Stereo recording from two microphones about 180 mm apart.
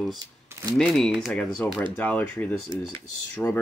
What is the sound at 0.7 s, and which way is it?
Speech, centre (ahead or behind).